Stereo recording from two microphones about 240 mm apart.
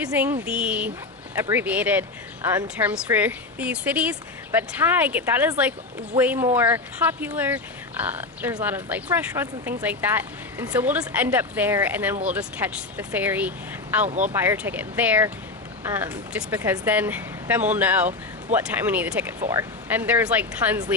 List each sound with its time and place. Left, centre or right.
0.0 s a woman's voice: centre
14.1 s speech: right
14.3 s a woman's voice: centre